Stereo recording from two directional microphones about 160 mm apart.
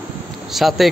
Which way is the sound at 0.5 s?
Centre (ahead or behind).